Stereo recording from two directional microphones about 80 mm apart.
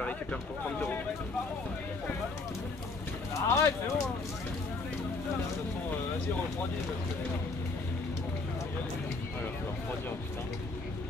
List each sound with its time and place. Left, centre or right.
3.3 s speech: left